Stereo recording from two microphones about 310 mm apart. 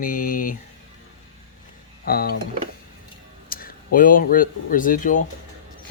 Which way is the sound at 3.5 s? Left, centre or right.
Left.